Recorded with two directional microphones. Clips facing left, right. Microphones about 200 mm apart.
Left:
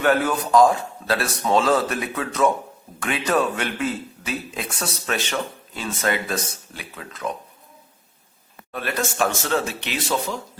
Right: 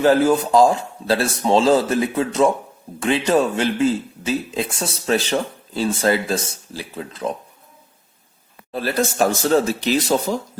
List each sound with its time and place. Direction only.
0.0 s speech: 30° right (ahead or behind)
8.7 s a man's voice: 30° right (ahead or behind)